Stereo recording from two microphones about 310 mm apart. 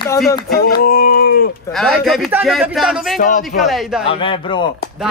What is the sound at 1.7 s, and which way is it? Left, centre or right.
Speech, centre.